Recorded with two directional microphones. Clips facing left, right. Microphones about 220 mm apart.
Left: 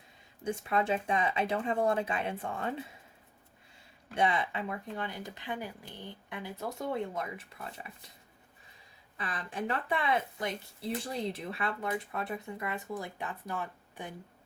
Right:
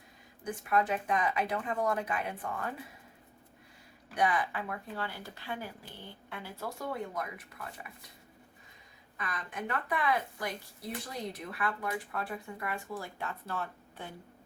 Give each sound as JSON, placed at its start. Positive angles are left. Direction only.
{"t": 0.4, "sound": "speech", "side_deg": 25}
{"t": 4.1, "sound": "speech", "side_deg": 25}
{"t": 9.1, "sound": "speech", "side_deg": 30}